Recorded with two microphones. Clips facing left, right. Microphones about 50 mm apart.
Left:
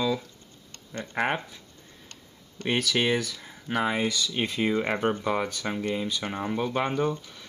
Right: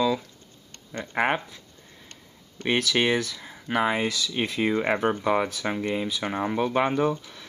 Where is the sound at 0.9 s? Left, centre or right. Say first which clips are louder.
Right 3 dB; centre.